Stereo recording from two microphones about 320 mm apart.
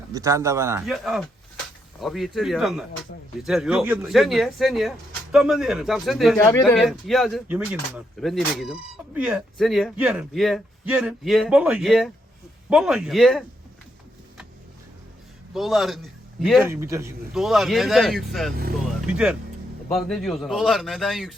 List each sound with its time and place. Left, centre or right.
0.1 s speech: centre
15.5 s speech: centre